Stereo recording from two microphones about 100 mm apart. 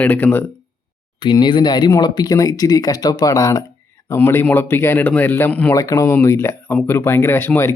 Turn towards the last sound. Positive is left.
turn(degrees=25)  # may be behind; listen again after turning